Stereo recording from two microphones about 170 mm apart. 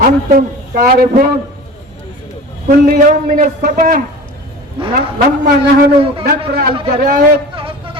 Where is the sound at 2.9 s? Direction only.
55° right (ahead or behind).